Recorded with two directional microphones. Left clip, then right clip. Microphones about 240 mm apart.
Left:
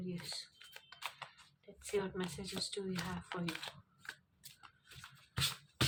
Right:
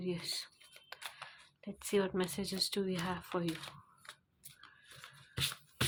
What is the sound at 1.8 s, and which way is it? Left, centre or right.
Speech, right.